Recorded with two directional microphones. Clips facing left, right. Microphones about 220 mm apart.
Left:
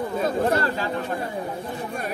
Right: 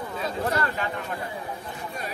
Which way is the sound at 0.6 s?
35° left (ahead or behind).